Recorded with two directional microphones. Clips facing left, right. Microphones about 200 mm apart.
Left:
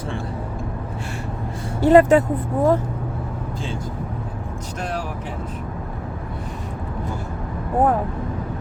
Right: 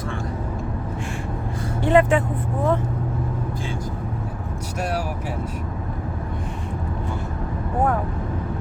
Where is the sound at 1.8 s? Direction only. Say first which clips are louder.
Left 5 dB; 40° left (ahead or behind).